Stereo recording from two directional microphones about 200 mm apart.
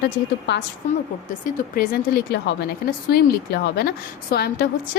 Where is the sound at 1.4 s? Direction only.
45° left (ahead or behind).